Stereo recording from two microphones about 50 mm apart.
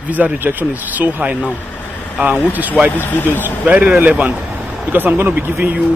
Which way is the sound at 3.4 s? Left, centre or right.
Right.